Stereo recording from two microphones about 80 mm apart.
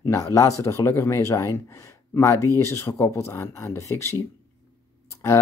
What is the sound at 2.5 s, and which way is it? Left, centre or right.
Mantra, left.